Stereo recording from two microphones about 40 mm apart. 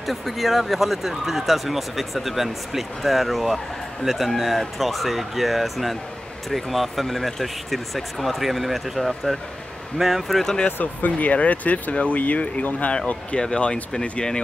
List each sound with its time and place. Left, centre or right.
0.0 s speech: centre
10.8 s speech: left